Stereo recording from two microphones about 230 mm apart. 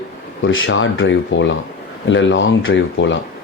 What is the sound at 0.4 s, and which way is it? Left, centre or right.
Speech, left.